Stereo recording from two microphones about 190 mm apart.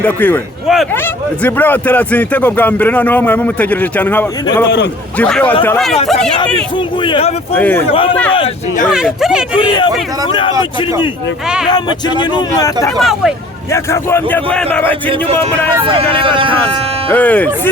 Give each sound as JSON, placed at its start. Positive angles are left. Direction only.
{"t": 0.0, "sound": "speech", "side_deg": 10}
{"t": 4.6, "sound": "a man's voice", "side_deg": 65}
{"t": 5.1, "sound": "speech", "side_deg": 5}
{"t": 6.4, "sound": "speech", "side_deg": 25}
{"t": 7.5, "sound": "speech", "side_deg": 10}
{"t": 7.9, "sound": "speech", "side_deg": 30}
{"t": 8.9, "sound": "speech", "side_deg": -5}
{"t": 9.6, "sound": "speech", "side_deg": 25}
{"t": 11.4, "sound": "speech", "side_deg": -5}
{"t": 11.7, "sound": "speech", "side_deg": 25}
{"t": 13.0, "sound": "speech", "side_deg": 0}
{"t": 13.7, "sound": "speech", "side_deg": 15}
{"t": 15.8, "sound": "speech", "side_deg": -30}
{"t": 17.1, "sound": "speech", "side_deg": 10}